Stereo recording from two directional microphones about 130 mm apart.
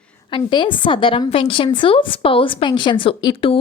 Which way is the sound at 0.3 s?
40° left (ahead or behind).